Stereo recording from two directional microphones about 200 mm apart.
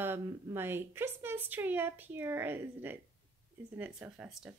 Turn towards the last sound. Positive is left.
turn(degrees=-5)  # may be behind; listen again after turning